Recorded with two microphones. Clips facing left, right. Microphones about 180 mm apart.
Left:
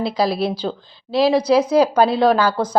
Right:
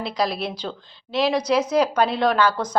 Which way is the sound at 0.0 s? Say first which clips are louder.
Left 5 dB; 30° left (ahead or behind).